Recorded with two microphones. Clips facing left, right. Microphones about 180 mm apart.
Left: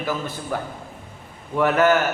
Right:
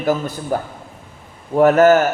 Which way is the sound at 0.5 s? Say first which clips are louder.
Right 7 dB; 35° right (ahead or behind).